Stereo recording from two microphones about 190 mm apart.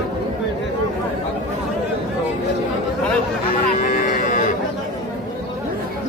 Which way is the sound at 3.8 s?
40° left (ahead or behind).